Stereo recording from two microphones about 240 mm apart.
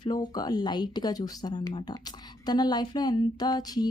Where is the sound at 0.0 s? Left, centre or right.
Centre.